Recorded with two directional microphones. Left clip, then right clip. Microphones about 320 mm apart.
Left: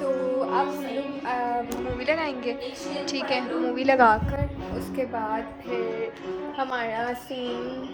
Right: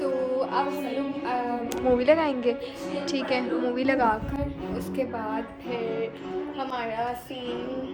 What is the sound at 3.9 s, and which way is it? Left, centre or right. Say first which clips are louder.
Speech: left 8 dB; left.